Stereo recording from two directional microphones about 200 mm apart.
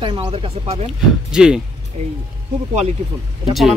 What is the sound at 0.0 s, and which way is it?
Speech, 25° right (ahead or behind).